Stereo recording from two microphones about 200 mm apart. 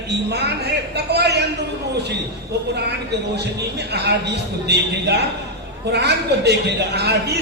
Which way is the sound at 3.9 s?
55° right (ahead or behind).